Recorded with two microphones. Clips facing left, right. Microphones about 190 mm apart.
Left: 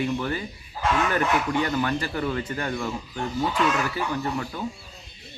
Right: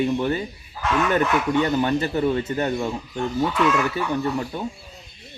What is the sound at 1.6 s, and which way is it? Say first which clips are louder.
Speech: right 4 dB; 25° right (ahead or behind).